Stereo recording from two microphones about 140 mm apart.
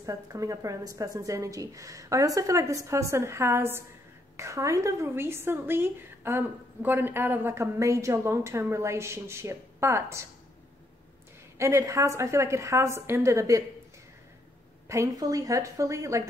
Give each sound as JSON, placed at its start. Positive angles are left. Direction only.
{"t": 0.0, "sound": "a woman's voice", "side_deg": -25}
{"t": 11.5, "sound": "a woman's voice", "side_deg": -20}
{"t": 14.9, "sound": "a woman's voice", "side_deg": -25}